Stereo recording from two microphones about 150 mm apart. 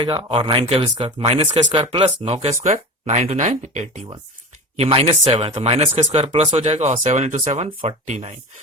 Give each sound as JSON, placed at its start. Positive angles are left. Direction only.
{"t": 0.0, "sound": "speech", "side_deg": -35}
{"t": 4.8, "sound": "speech", "side_deg": -35}